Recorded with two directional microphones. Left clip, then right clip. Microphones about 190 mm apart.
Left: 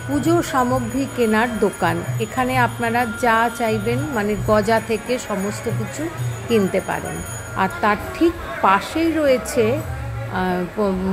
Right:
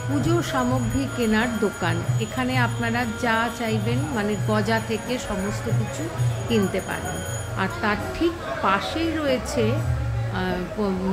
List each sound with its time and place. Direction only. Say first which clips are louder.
0.2 s speech: left 6 dB; 20° left (ahead or behind)
6.5 s speech: left 6 dB; 20° left (ahead or behind)